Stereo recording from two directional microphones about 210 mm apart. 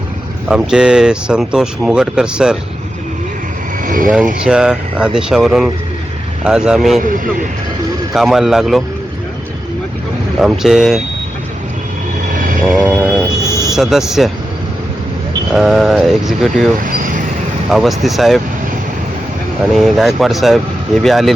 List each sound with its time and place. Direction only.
0.4 s speech: 5° right (ahead or behind)
3.8 s speech: 40° right (ahead or behind)
4.4 s speech: 5° right (ahead or behind)
8.1 s speech: centre (ahead or behind)
10.4 s speech: centre (ahead or behind)
12.3 s vehicle: 40° right (ahead or behind)
12.7 s speech: centre (ahead or behind)
13.0 s a sound: 5° right (ahead or behind)
13.4 s a sound: 15° left (ahead or behind)
13.7 s speech: centre (ahead or behind)
15.5 s speech: centre (ahead or behind)
16.8 s a sound: 40° right (ahead or behind)
17.7 s speech: centre (ahead or behind)
19.7 s speech: centre (ahead or behind)